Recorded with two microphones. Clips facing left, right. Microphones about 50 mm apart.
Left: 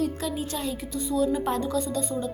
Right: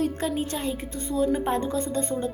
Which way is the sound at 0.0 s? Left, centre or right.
Right.